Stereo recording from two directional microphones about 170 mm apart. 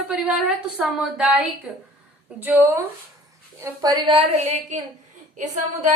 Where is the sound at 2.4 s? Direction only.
10° right (ahead or behind); by 4.7 s 40° right (ahead or behind).